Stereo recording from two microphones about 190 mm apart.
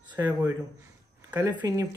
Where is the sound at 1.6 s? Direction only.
20° right (ahead or behind).